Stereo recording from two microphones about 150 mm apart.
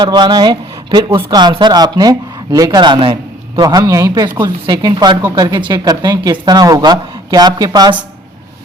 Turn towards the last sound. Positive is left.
turn(degrees=-25)  # may be behind; listen again after turning